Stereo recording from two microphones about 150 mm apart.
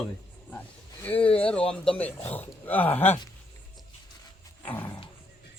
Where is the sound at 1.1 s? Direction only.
35° left (ahead or behind).